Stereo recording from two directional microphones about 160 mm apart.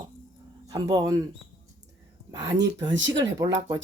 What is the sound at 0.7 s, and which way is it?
Speech, 25° right (ahead or behind).